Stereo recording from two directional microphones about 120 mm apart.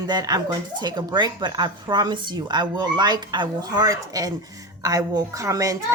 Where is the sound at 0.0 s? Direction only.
35° right (ahead or behind).